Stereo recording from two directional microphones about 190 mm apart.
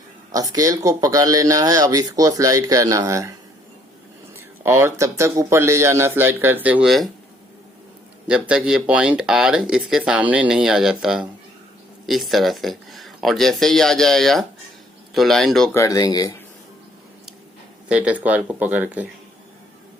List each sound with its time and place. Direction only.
0.3 s speech: 20° right (ahead or behind)
4.4 s speech: 15° right (ahead or behind)
8.3 s speech: 5° right (ahead or behind)
15.7 s speech: 15° left (ahead or behind)
17.8 s speech: 5° right (ahead or behind)